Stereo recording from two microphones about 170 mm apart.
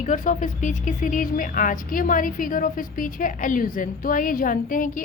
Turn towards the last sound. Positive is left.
turn(degrees=50)  # may be behind; listen again after turning